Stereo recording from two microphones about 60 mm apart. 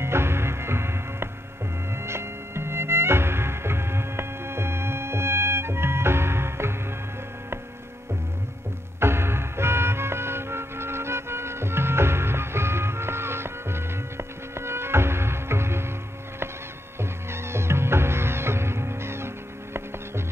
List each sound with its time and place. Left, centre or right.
0.0 s music: right
9.0 s music: right
17.0 s cat: right